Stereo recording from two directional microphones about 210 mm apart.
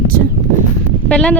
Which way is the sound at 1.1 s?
5° left (ahead or behind).